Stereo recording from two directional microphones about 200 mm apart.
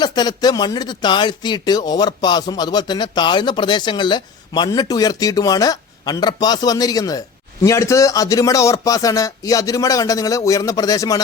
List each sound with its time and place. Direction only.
0.0 s speech: 20° left (ahead or behind)